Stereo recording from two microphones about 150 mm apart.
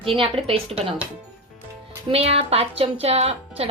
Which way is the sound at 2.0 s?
40° right (ahead or behind).